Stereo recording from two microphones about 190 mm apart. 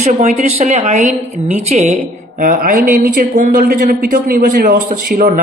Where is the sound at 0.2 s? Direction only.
35° right (ahead or behind).